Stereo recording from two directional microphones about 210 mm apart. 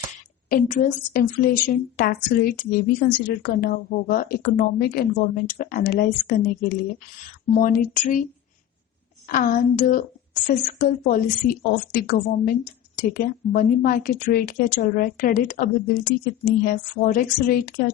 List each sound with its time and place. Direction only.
0.5 s a woman's voice: 40° left (ahead or behind)
9.3 s a woman's voice: 40° left (ahead or behind)